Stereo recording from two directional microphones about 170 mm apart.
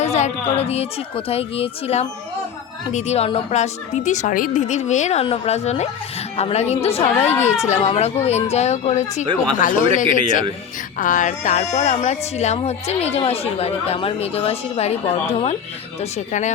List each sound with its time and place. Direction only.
0.0 s a woman's voice: 40° left (ahead or behind)